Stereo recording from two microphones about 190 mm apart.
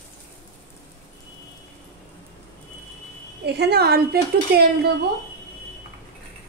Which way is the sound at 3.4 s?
60° right (ahead or behind).